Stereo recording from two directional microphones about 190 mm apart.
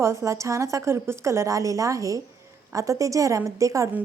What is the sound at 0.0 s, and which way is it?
Speech, 15° right (ahead or behind).